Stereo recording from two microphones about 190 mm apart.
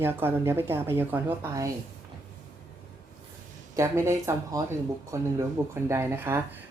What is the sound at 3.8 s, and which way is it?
Speech, 15° right (ahead or behind).